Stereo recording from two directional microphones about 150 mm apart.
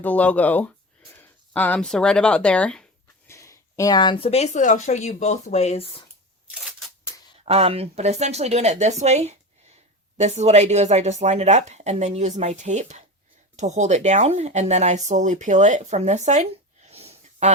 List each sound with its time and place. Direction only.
0.0 s speech: 10° left (ahead or behind)
3.2 s speech: 20° left (ahead or behind); by 5.9 s 45° left (ahead or behind)
6.5 s scissors: centre (ahead or behind)
7.4 s speech: 40° right (ahead or behind)